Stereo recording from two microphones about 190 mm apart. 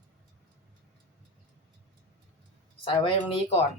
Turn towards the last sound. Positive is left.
turn(degrees=30)  # may be behind; listen again after turning